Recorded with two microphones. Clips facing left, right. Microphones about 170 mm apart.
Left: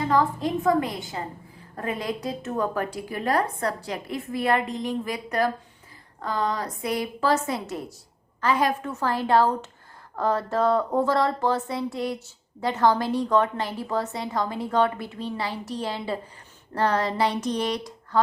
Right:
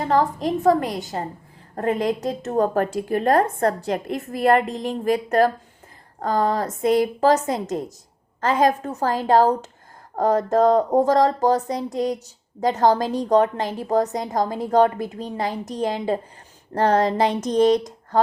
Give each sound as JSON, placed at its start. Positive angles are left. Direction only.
{"t": 0.0, "sound": "a woman's voice", "side_deg": -45}
{"t": 8.6, "sound": "speech", "side_deg": -40}
{"t": 11.7, "sound": "speech", "side_deg": -20}
{"t": 12.5, "sound": "a woman's voice", "side_deg": -40}